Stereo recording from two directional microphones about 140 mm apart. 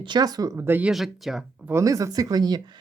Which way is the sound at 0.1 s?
30° right (ahead or behind).